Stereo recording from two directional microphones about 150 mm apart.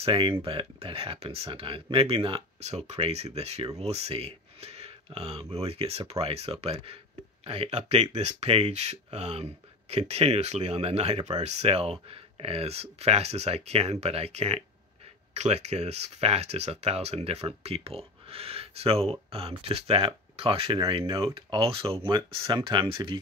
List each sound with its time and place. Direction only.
0.0 s speech: 35° right (ahead or behind)